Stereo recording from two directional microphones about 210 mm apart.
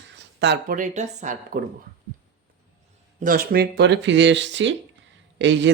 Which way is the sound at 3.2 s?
45° right (ahead or behind).